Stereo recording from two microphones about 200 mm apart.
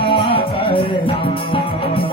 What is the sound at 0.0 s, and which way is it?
Music, 25° left (ahead or behind).